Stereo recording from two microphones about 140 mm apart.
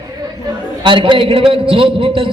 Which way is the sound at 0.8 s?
35° right (ahead or behind).